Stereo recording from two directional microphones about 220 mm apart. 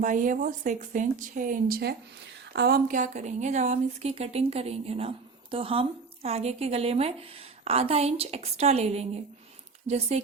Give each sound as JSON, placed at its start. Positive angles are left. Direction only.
{"t": 0.0, "sound": "a woman's voice", "side_deg": -35}